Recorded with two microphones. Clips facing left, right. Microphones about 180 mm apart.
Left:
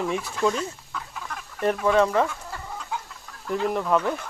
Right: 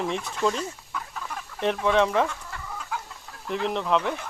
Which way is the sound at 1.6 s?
5° left (ahead or behind).